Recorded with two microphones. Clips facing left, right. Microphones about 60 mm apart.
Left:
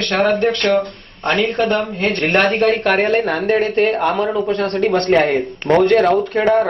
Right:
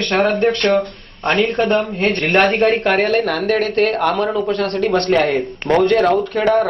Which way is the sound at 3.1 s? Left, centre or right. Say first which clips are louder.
Left 1 dB; left.